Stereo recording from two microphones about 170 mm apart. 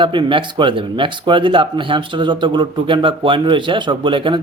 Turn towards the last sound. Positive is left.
turn(degrees=-30)  # may be behind; listen again after turning